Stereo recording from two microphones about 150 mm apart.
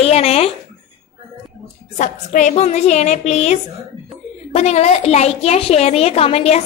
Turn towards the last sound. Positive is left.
turn(degrees=45)  # may be behind; listen again after turning